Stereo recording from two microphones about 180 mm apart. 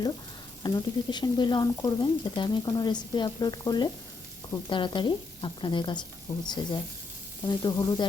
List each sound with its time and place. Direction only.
0.6 s speech: 25° left (ahead or behind)